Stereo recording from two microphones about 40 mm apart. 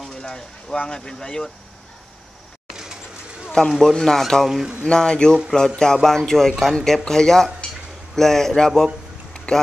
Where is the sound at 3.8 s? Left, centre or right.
Centre.